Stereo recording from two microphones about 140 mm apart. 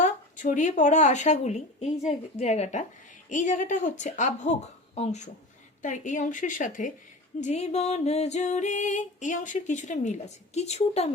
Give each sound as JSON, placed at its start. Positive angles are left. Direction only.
{"t": 0.0, "sound": "speech", "side_deg": 65}
{"t": 4.9, "sound": "music", "side_deg": 55}
{"t": 5.8, "sound": "speech", "side_deg": 60}
{"t": 7.4, "sound": "music", "side_deg": 55}